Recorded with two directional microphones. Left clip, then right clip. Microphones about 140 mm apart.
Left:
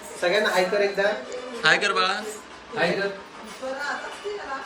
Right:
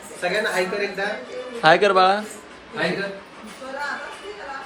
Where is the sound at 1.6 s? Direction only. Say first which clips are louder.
Right 6 dB; 20° right (ahead or behind).